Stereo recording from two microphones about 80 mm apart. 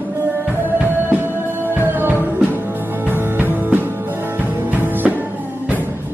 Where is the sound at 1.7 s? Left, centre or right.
Right.